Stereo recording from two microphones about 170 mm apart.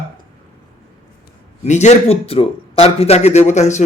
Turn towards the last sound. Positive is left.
turn(degrees=45)  # may be behind; listen again after turning